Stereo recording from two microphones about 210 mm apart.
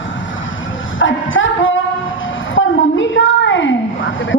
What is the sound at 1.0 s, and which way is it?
Music, 65° left (ahead or behind).